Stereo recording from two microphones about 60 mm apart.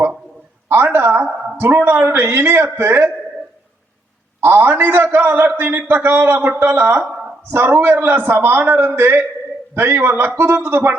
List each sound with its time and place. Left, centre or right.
0.9 s a man's voice: right
4.4 s a man's voice: right